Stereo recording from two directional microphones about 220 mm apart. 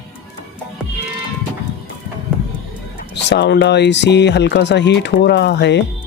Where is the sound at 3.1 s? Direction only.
50° left (ahead or behind).